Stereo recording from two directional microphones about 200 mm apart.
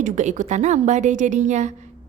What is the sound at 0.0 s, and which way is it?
A woman's voice, 35° right (ahead or behind).